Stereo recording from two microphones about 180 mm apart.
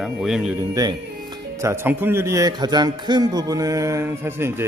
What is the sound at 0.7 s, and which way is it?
A man's voice, 20° right (ahead or behind).